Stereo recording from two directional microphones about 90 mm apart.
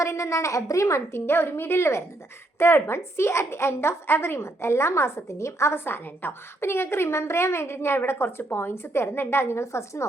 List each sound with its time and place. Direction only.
0.0 s a woman's voice: 35° left (ahead or behind)